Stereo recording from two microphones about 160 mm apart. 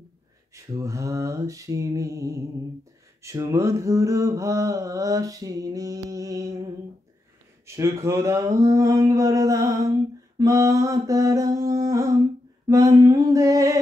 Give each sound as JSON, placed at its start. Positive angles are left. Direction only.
{"t": 0.7, "sound": "speech", "side_deg": -20}